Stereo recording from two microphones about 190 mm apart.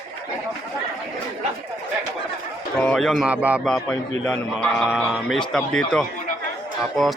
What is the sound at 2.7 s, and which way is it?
Speech, 5° left (ahead or behind).